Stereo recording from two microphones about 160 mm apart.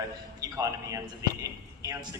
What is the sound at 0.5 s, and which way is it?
Speech, 20° right (ahead or behind).